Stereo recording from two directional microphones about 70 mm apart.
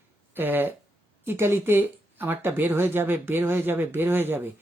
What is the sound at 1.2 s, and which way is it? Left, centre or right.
Speech, right.